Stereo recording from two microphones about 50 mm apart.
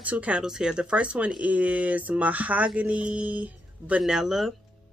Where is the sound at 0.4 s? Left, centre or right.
Centre; by 4.0 s right.